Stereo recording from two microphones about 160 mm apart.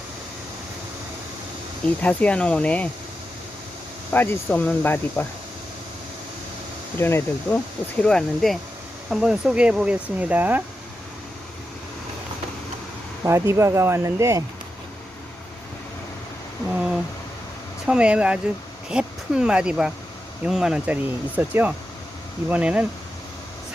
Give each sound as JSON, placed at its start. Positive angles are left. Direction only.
{"t": 2.0, "sound": "speech", "side_deg": 10}
{"t": 4.1, "sound": "speech", "side_deg": 10}
{"t": 7.0, "sound": "speech", "side_deg": 15}
{"t": 13.2, "sound": "speech", "side_deg": -15}
{"t": 17.8, "sound": "speech", "side_deg": -5}